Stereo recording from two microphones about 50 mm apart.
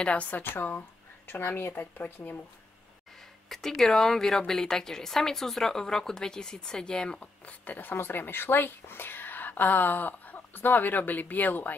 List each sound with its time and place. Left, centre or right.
0.0 s a woman's voice: left
0.4 s speech: left
3.4 s speech: centre
7.2 s speech: left
7.9 s a woman's voice: left